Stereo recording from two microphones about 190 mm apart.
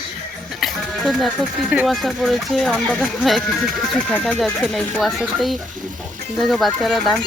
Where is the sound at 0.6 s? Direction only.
Centre (ahead or behind).